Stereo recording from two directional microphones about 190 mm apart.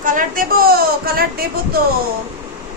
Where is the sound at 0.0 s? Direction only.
45° right (ahead or behind).